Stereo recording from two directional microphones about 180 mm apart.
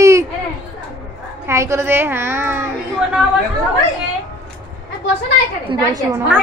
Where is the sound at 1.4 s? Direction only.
15° right (ahead or behind).